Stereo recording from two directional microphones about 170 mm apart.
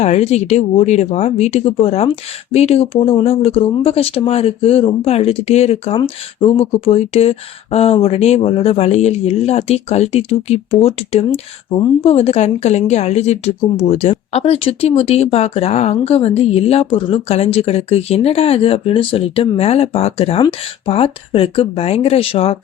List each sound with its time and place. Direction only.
0.0 s speech: 40° left (ahead or behind)